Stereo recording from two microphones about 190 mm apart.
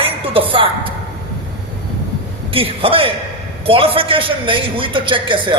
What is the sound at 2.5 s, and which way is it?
A man's voice, 30° right (ahead or behind).